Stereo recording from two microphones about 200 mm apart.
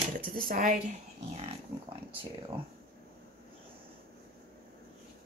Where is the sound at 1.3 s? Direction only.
30° right (ahead or behind).